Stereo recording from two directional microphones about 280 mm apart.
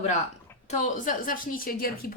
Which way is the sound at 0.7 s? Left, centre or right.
Left.